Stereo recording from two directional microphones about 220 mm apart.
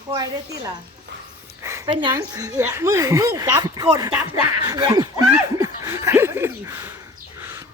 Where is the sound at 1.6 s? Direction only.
15° right (ahead or behind).